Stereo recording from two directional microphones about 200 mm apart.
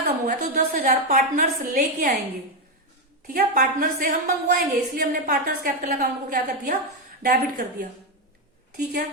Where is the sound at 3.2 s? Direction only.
40° right (ahead or behind).